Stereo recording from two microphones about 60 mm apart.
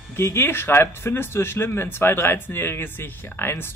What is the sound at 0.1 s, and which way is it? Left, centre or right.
Speech, left.